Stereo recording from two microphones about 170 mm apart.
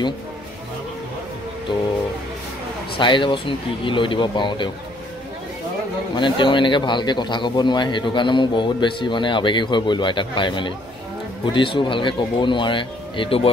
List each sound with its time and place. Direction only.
3.0 s speech: 30° left (ahead or behind)
6.1 s speech: 25° left (ahead or behind)